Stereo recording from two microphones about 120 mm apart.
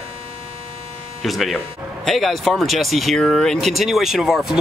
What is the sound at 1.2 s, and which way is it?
Speech, centre (ahead or behind).